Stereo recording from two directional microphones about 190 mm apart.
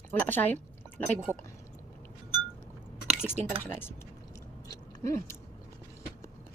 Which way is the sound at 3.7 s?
10° left (ahead or behind).